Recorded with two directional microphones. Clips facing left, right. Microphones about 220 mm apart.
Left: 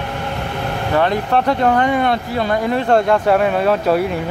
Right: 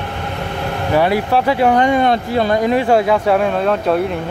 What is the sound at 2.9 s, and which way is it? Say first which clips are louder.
Speech: left 3 dB; 5° right (ahead or behind).